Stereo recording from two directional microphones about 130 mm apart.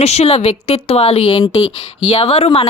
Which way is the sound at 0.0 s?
55° left (ahead or behind).